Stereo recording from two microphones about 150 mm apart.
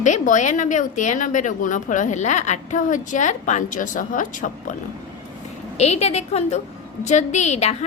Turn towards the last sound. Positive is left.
turn(degrees=50)  # may be behind; listen again after turning